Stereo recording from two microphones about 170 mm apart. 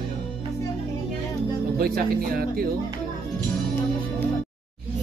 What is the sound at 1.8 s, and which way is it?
Speech, 60° right (ahead or behind).